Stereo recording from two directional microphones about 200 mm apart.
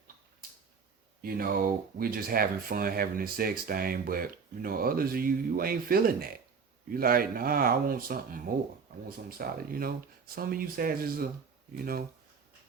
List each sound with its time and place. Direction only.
1.2 s speech: 45° right (ahead or behind)